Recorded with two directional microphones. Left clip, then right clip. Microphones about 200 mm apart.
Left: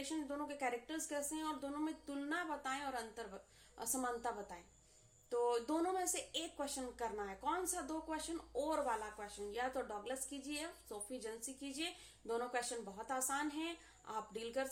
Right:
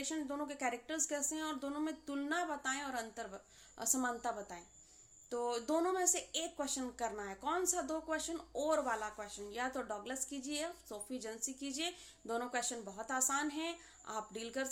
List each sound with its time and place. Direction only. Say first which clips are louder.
0.0 s speech: right 3 dB; 35° right (ahead or behind)